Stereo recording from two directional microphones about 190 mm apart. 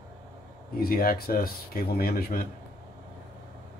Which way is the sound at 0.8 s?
50° left (ahead or behind).